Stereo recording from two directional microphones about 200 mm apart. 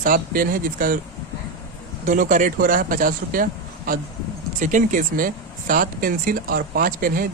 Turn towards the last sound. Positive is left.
turn(degrees=-45)  # may be behind; listen again after turning